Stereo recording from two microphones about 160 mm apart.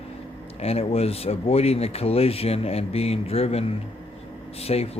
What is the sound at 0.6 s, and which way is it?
Speech, 40° left (ahead or behind).